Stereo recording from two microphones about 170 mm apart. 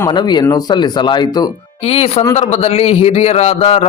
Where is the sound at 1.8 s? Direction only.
35° left (ahead or behind).